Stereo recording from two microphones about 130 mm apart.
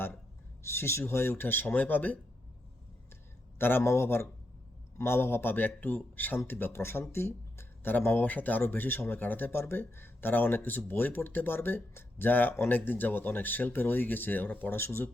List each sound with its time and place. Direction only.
0.6 s speech: 20° left (ahead or behind)
3.6 s speech: 15° left (ahead or behind)